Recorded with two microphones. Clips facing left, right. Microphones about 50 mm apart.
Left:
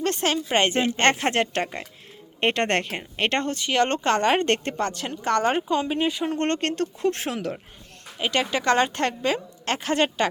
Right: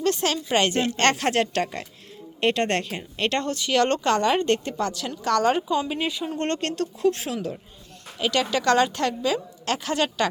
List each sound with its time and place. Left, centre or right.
0.0 s speech: left
8.2 s speech: left